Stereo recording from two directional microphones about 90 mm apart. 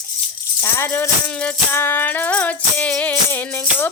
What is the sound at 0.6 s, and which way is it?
Speech, 25° left (ahead or behind).